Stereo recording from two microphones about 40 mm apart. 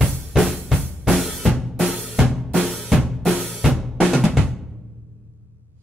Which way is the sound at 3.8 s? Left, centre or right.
Centre.